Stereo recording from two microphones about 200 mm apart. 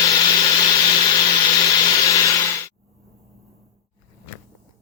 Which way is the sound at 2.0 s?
15° left (ahead or behind).